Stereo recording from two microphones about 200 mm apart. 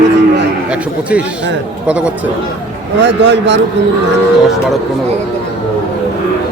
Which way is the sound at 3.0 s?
60° right (ahead or behind).